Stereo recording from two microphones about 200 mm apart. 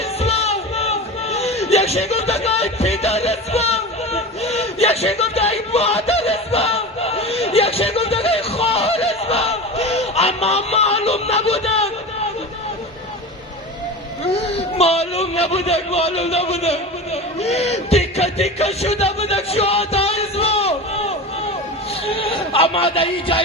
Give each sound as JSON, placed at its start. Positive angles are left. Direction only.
{"t": 0.2, "sound": "music", "side_deg": 30}
{"t": 14.5, "sound": "a man's voice", "side_deg": 30}
{"t": 17.4, "sound": "music", "side_deg": 30}
{"t": 22.0, "sound": "speech", "side_deg": 30}